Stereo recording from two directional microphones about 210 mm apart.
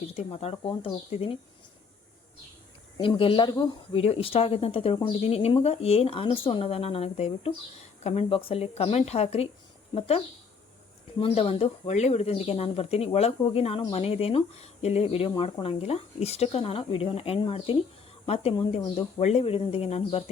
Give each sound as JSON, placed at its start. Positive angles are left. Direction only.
{"t": 0.1, "sound": "speech", "side_deg": 30}
{"t": 3.0, "sound": "speech", "side_deg": 25}